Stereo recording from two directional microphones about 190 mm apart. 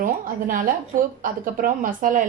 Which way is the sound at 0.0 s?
45° right (ahead or behind).